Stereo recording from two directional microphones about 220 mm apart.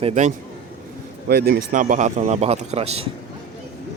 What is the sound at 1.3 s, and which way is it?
Speech, 45° right (ahead or behind).